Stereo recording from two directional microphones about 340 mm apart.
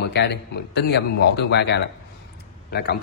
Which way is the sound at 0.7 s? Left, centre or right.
Left.